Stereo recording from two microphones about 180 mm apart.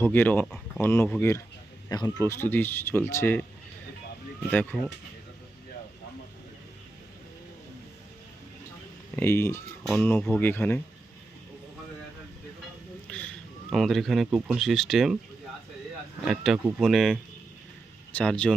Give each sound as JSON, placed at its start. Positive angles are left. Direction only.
{"t": 0.0, "sound": "speech", "side_deg": 10}
{"t": 1.9, "sound": "speech", "side_deg": 20}
{"t": 4.5, "sound": "speech", "side_deg": 5}
{"t": 9.1, "sound": "speech", "side_deg": 15}
{"t": 9.8, "sound": "speech", "side_deg": 0}
{"t": 13.1, "sound": "a man's voice", "side_deg": 5}
{"t": 16.2, "sound": "speech", "side_deg": 0}